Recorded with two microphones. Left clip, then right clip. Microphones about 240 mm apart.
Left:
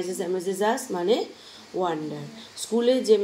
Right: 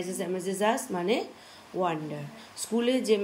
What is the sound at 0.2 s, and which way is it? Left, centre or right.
Speech, right.